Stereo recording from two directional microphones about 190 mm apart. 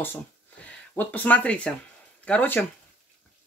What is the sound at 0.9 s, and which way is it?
Speech, 10° left (ahead or behind).